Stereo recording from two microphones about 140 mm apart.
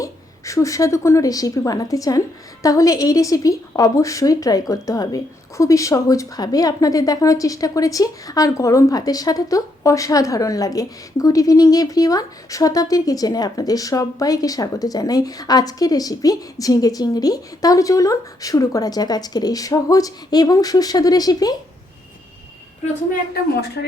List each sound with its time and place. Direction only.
0.0 s a woman's voice: 20° left (ahead or behind)